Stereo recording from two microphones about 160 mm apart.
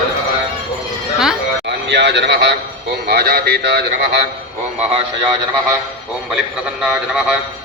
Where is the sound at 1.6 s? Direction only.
90° right.